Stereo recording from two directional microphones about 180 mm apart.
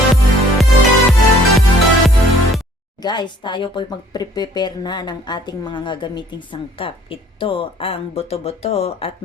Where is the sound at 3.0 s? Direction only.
25° left (ahead or behind).